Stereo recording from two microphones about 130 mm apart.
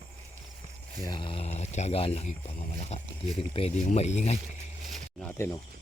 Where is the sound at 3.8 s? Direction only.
60° left (ahead or behind).